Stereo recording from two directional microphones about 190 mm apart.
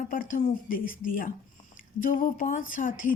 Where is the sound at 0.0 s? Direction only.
45° left (ahead or behind).